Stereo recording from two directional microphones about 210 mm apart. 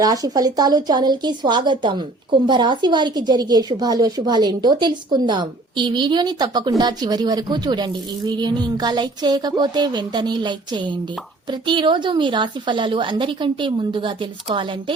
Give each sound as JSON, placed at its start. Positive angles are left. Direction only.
{"t": 0.0, "sound": "a woman's voice", "side_deg": -15}